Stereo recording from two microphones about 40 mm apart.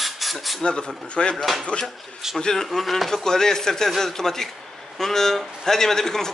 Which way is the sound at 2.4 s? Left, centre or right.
Centre.